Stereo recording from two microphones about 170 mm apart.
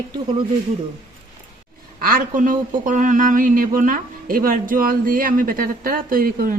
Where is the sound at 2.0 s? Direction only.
55° right (ahead or behind).